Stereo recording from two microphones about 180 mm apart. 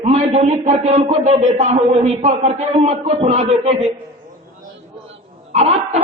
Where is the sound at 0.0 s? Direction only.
35° right (ahead or behind).